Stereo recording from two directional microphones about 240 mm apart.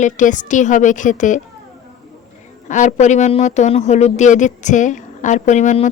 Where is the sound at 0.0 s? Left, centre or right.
Left.